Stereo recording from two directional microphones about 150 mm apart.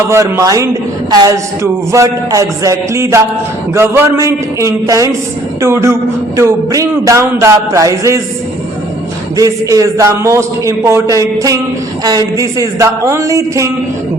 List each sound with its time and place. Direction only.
0.1 s a woman's voice: 20° right (ahead or behind)
9.3 s a woman's voice: 20° right (ahead or behind)